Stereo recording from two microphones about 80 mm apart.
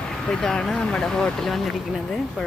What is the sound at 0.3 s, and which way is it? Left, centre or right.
Speech, centre.